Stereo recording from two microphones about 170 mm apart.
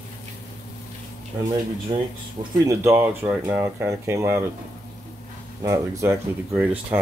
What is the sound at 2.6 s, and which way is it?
Speech, 15° right (ahead or behind).